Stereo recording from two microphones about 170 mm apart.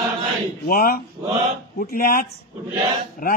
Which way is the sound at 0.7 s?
60° left (ahead or behind).